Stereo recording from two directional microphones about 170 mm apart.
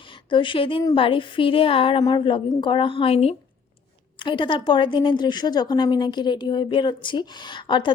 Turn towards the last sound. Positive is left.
turn(degrees=25)  # may be behind; listen again after turning